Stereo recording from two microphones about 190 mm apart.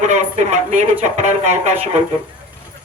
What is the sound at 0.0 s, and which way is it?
Speech, 40° right (ahead or behind).